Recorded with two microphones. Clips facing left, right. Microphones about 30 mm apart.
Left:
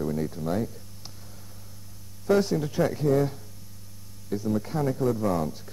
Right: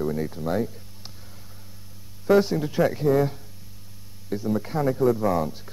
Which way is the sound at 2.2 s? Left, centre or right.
Centre.